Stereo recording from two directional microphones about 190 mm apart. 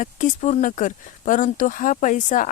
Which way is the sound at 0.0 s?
40° left (ahead or behind).